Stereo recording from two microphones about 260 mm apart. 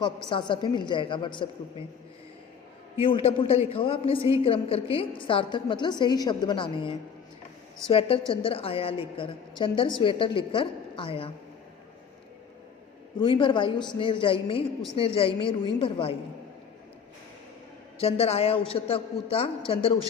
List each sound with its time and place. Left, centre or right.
0.0 s a woman's voice: centre
2.9 s a man's voice: left
13.1 s a woman's voice: centre
18.0 s a woman's voice: left